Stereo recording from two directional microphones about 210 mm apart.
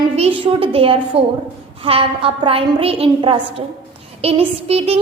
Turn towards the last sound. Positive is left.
turn(degrees=-30)  # may be behind; listen again after turning